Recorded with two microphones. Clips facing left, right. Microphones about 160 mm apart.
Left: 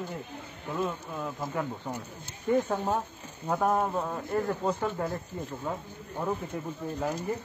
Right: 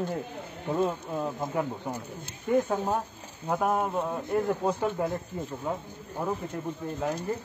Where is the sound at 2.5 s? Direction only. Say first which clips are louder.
Right 1 dB; centre (ahead or behind).